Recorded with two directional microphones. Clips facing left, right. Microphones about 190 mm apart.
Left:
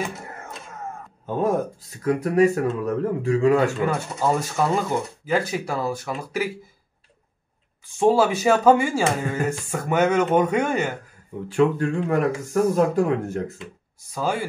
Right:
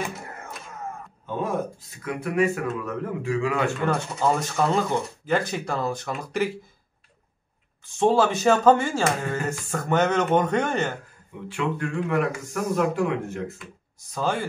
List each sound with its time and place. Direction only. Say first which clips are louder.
1.2 s speech: left 5 dB; 40° left (ahead or behind)
3.8 s speech: left 1 dB; 5° left (ahead or behind)
8.0 s speech: left 2 dB; 10° left (ahead or behind)
11.4 s speech: left 8 dB; 40° left (ahead or behind)
14.1 s speech: left 1 dB; 10° left (ahead or behind)